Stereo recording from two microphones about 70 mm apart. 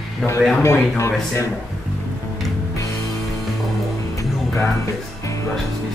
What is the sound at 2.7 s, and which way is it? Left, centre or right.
Music, left.